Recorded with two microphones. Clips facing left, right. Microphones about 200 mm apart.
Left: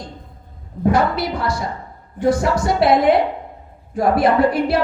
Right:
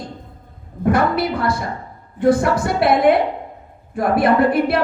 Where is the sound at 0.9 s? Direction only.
55° right (ahead or behind).